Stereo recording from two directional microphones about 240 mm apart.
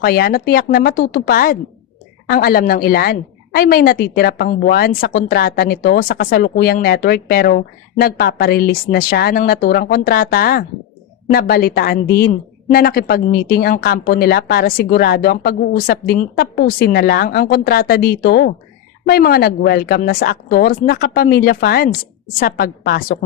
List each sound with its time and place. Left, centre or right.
0.0 s a woman's voice: left